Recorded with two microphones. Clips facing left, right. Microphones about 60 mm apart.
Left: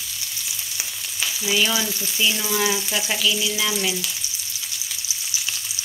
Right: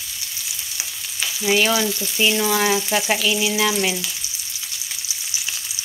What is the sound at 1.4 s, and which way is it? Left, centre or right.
Speech, right.